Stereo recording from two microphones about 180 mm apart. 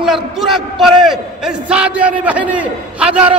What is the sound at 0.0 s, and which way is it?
A man's voice, centre (ahead or behind).